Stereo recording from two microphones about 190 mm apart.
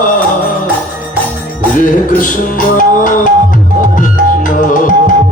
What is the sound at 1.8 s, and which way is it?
Music, 45° left (ahead or behind).